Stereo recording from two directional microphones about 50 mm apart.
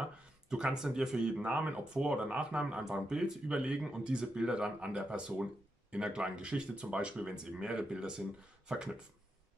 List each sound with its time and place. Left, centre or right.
0.0 s a sound: centre
0.8 s speech: centre; by 1.8 s right
2.0 s speech: centre